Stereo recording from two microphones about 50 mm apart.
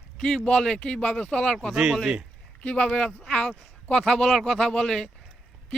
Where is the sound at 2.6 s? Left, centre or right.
Left.